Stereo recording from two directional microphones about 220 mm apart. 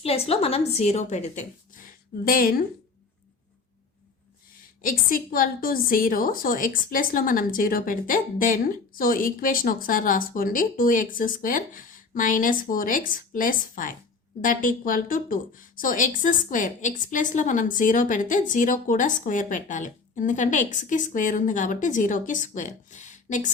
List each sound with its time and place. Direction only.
0.0 s a woman's voice: 25° left (ahead or behind)
4.8 s a woman's voice: 40° left (ahead or behind)